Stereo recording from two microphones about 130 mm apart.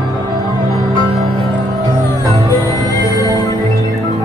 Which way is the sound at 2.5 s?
30° left (ahead or behind).